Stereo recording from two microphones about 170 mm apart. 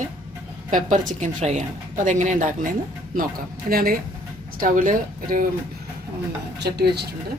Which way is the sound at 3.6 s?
60° right (ahead or behind).